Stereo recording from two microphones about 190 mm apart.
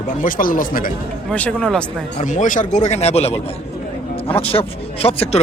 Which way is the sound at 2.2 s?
40° left (ahead or behind).